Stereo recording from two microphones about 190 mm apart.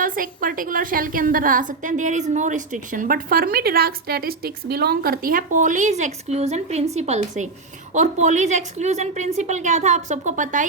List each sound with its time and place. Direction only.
0.0 s a woman's voice: 45° right (ahead or behind)